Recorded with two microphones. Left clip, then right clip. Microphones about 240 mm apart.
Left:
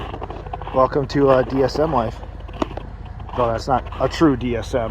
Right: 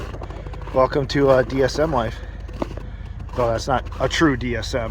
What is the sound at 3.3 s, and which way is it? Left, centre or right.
Speech, right.